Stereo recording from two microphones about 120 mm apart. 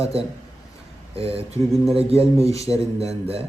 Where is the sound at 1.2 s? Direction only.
55° right (ahead or behind).